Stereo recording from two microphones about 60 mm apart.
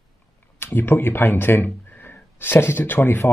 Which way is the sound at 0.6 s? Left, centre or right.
Left.